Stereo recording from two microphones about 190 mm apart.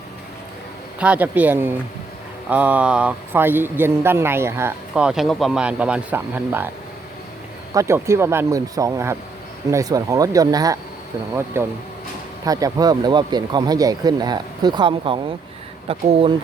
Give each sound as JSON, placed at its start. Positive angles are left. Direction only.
{"t": 0.9, "sound": "speech", "side_deg": -5}
{"t": 7.7, "sound": "speech", "side_deg": -15}